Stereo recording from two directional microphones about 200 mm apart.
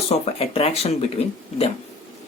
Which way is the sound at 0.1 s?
30° left (ahead or behind).